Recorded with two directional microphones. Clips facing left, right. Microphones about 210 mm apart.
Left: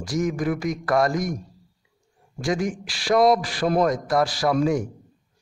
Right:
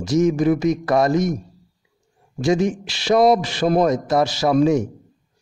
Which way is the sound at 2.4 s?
25° right (ahead or behind).